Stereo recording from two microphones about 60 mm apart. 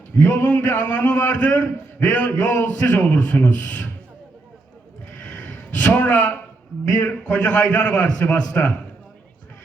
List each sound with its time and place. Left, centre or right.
0.2 s a man's voice: left
5.2 s a sound: left
7.1 s a man's voice: left